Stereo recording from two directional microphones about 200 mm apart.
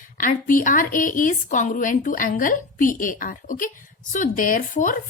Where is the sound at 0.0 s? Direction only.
40° left (ahead or behind).